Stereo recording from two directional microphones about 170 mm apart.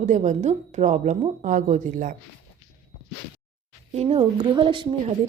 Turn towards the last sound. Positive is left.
turn(degrees=-30)  # may be behind; listen again after turning